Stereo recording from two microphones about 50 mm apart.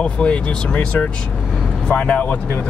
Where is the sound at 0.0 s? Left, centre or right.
Left.